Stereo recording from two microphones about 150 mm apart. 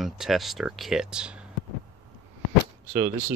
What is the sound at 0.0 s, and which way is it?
Speech, centre (ahead or behind).